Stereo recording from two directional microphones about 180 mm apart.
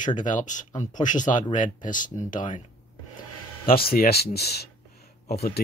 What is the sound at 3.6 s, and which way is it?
Speech, 55° left (ahead or behind).